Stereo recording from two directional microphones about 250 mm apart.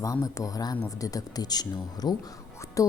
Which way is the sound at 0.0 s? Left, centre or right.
Centre.